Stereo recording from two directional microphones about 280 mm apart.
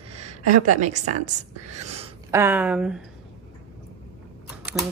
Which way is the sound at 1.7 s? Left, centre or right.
Right.